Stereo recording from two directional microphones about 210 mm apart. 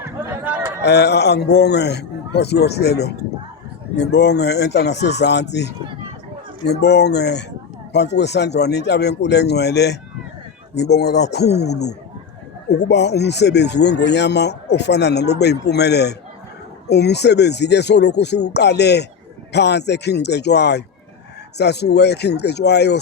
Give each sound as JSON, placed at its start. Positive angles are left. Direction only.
{"t": 0.8, "sound": "speech", "side_deg": 50}